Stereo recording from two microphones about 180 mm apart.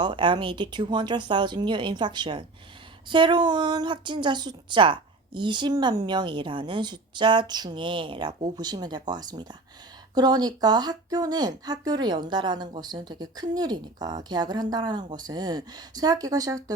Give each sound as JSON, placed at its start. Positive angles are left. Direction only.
{"t": 0.0, "sound": "a woman's voice", "side_deg": -25}